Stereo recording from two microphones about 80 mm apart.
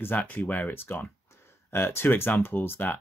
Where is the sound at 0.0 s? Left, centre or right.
Left.